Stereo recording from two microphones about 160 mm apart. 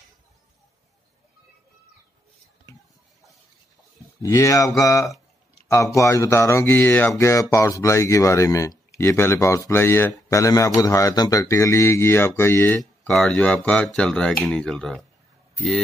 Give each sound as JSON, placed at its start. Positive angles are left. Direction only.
{"t": 4.2, "sound": "speech", "side_deg": 20}
{"t": 13.0, "sound": "speech", "side_deg": 5}